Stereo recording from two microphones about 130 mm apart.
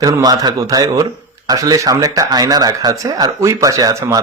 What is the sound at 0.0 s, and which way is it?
Speech, 30° right (ahead or behind).